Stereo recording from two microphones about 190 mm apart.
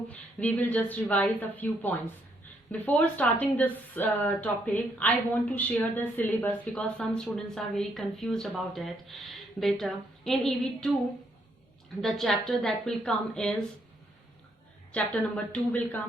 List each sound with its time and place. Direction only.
0.1 s a woman's voice: 10° left (ahead or behind)
12.0 s a woman's voice: centre (ahead or behind)
14.9 s a woman's voice: 5° left (ahead or behind)